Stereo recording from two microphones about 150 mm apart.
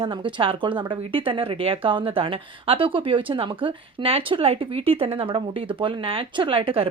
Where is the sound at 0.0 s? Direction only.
35° right (ahead or behind).